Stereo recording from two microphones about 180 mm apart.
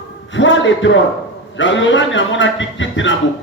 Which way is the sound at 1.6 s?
90° left.